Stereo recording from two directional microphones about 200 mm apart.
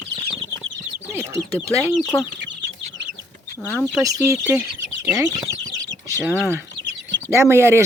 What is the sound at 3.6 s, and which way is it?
Speech, centre (ahead or behind).